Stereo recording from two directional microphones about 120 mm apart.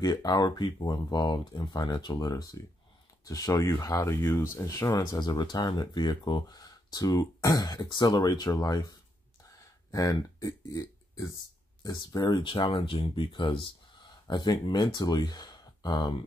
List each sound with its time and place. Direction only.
0.0 s speech: 35° left (ahead or behind)